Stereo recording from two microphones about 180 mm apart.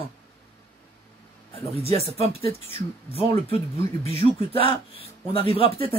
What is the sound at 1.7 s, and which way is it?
Speech, 35° right (ahead or behind).